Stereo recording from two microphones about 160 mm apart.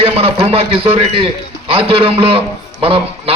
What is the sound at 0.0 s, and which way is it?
A man's voice, 35° right (ahead or behind).